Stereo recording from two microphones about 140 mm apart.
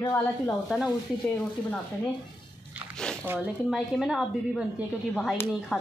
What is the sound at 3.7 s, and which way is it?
Speech, centre (ahead or behind).